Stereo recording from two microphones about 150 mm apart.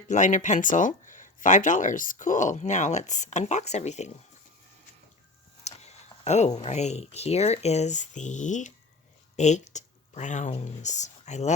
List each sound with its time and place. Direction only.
0.1 s speech: 55° left (ahead or behind)
5.6 s speech: 45° left (ahead or behind)